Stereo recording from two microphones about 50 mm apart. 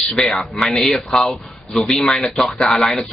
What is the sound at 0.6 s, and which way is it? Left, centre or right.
A man's voice, centre.